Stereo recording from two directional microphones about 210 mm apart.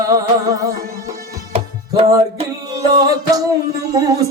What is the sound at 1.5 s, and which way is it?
Music, 30° right (ahead or behind).